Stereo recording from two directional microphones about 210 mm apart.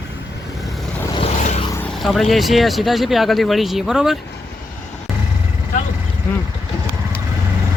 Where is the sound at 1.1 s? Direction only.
30° left (ahead or behind).